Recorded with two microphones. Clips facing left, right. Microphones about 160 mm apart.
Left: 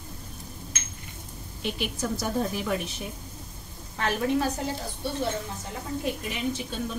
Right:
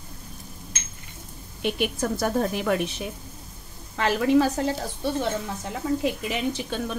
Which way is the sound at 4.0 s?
90° right.